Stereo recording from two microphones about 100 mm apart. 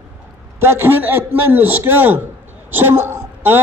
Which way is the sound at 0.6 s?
25° right (ahead or behind).